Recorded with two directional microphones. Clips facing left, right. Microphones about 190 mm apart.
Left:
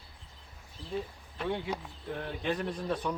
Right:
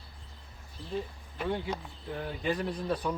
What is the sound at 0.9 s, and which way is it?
Speech, centre (ahead or behind).